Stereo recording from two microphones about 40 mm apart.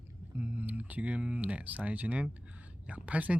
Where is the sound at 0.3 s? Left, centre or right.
Right.